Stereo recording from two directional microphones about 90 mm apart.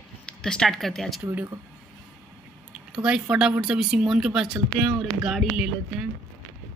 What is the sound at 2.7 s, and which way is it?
Speech, 10° right (ahead or behind).